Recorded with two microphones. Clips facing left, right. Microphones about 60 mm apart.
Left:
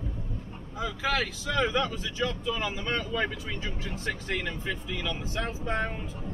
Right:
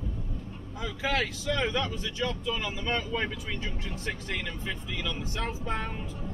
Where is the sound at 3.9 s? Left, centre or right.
Centre.